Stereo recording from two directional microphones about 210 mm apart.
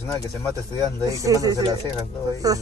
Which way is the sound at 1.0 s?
15° right (ahead or behind).